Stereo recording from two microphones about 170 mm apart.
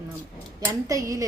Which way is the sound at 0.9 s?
20° right (ahead or behind).